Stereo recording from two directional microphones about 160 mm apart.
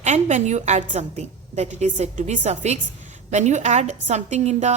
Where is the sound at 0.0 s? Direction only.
45° right (ahead or behind).